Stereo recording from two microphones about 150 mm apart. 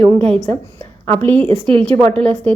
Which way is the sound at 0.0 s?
40° right (ahead or behind).